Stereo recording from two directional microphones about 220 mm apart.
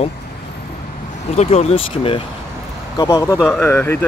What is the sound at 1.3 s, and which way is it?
Speech, 25° left (ahead or behind).